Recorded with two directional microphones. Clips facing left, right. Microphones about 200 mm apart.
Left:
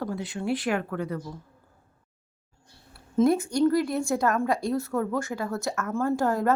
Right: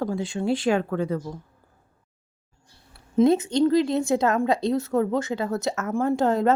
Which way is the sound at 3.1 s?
20° right (ahead or behind).